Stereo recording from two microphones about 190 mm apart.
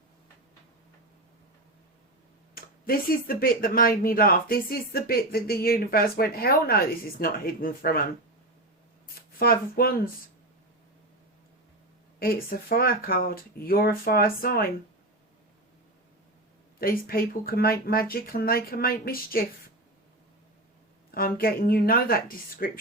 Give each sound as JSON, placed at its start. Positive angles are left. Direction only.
{"t": 2.6, "sound": "speech", "side_deg": 50}
{"t": 9.4, "sound": "speech", "side_deg": 50}
{"t": 12.2, "sound": "speech", "side_deg": 50}
{"t": 16.8, "sound": "speech", "side_deg": 50}
{"t": 21.1, "sound": "speech", "side_deg": 50}